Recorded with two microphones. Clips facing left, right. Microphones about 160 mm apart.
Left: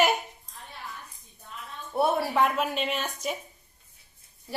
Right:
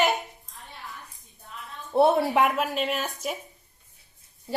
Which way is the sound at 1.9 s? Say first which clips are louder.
Right 4 dB; 20° right (ahead or behind).